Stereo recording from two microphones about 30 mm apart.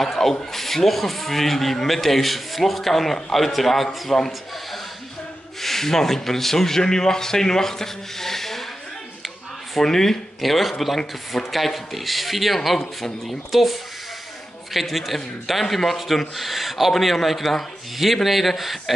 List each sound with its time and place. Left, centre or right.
0.0 s speech: centre
5.6 s speech: centre
9.8 s speech: centre
10.4 s speech: centre
13.5 s speech: centre